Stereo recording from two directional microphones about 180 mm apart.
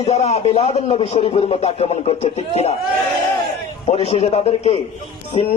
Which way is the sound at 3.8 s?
35° left (ahead or behind).